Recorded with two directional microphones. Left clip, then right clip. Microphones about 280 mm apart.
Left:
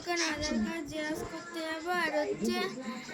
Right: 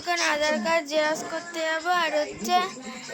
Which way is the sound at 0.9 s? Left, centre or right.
Right.